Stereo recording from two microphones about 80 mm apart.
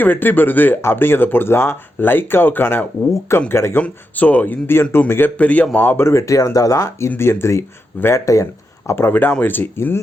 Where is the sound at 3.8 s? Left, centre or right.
Centre.